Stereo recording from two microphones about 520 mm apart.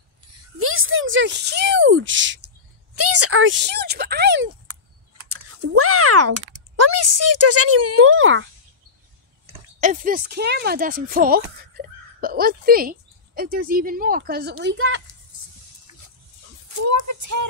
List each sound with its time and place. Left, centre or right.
0.6 s speech: right
5.1 s typing: right
6.8 s speech: right
9.8 s speech: centre
16.6 s speech: right